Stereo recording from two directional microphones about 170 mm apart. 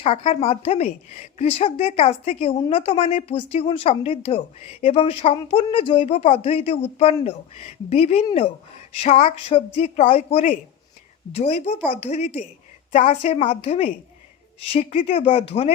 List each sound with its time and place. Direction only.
0.0 s a woman's voice: 35° left (ahead or behind)